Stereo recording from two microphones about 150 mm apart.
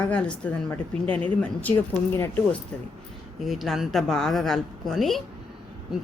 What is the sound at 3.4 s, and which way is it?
A woman's voice, centre (ahead or behind).